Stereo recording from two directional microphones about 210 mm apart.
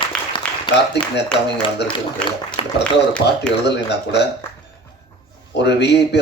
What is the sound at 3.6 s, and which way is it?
Speech, 55° left (ahead or behind).